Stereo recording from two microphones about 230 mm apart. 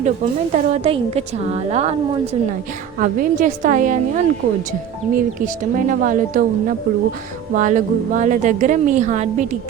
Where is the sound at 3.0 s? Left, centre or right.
Right.